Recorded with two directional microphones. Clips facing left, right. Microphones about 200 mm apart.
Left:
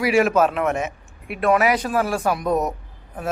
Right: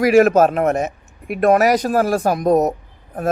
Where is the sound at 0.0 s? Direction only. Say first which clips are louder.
Right 6 dB; 45° right (ahead or behind).